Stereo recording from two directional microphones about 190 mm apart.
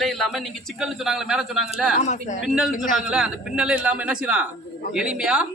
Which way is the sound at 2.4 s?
Centre (ahead or behind).